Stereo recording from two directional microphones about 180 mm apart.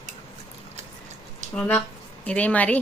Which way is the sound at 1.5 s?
10° left (ahead or behind).